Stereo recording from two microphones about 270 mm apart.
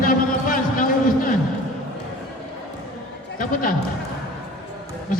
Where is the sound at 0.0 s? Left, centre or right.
Left.